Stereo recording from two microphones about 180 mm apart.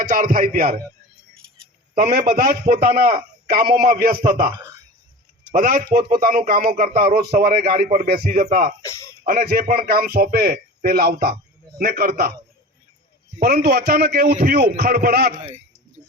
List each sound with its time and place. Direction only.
0.0 s a man's voice: 50° right (ahead or behind)
2.0 s a man's voice: 55° right (ahead or behind)
8.8 s speech: 15° left (ahead or behind)
9.2 s a man's voice: 55° right (ahead or behind)
13.4 s a man's voice: 55° right (ahead or behind)
15.4 s speech: 35° right (ahead or behind)